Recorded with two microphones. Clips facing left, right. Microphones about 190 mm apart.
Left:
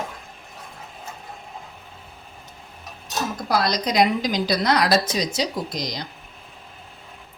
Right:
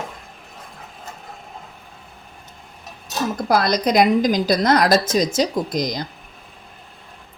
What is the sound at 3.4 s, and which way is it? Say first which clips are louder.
A woman's voice: right 5 dB; 55° right (ahead or behind).